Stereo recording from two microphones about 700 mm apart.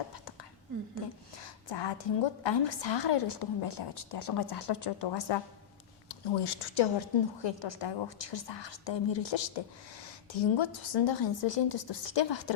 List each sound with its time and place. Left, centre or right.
1.4 s a woman's voice: left